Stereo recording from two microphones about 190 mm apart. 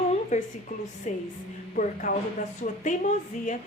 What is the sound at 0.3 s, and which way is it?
Speech, 35° left (ahead or behind).